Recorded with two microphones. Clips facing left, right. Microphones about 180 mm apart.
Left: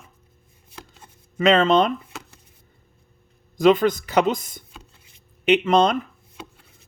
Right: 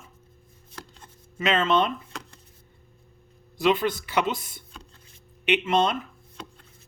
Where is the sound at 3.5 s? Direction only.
45° left (ahead or behind).